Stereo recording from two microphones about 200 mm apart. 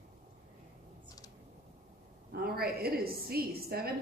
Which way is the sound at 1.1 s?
20° left (ahead or behind).